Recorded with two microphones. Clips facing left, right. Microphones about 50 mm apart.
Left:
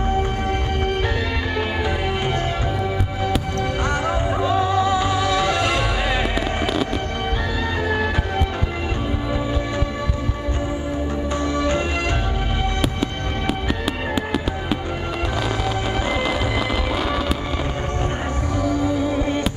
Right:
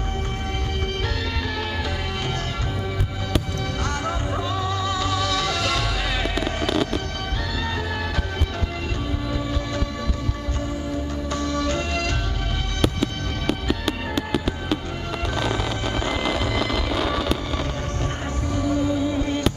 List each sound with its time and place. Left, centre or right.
3.8 s music: left
6.3 s fireworks: centre
11.5 s music: left
12.8 s music: centre
16.1 s music: centre